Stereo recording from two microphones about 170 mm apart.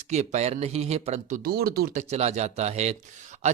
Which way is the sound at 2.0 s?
40° right (ahead or behind).